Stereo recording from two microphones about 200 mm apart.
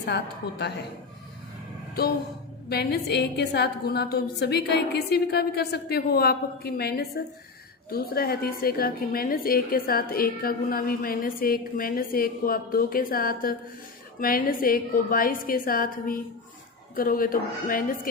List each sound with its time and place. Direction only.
2.6 s a woman's voice: 55° left (ahead or behind)